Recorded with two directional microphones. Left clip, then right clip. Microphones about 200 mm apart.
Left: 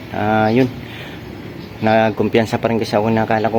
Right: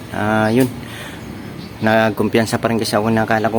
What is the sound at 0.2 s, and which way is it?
Speech, 5° right (ahead or behind).